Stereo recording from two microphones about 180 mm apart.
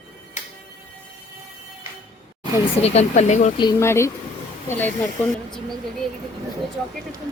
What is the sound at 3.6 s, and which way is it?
Speech, 20° left (ahead or behind).